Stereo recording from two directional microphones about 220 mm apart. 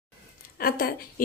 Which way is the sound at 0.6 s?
45° left (ahead or behind).